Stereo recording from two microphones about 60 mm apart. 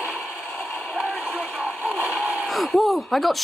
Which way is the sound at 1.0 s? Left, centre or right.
Left.